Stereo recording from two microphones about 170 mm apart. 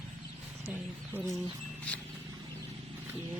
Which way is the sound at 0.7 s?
10° right (ahead or behind).